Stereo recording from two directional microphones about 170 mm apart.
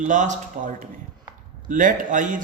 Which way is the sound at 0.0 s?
45° right (ahead or behind).